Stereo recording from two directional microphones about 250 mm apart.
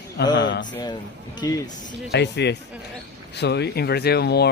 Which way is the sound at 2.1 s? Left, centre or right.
Left.